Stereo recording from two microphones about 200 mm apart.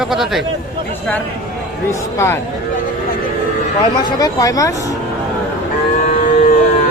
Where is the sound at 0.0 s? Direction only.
Centre (ahead or behind).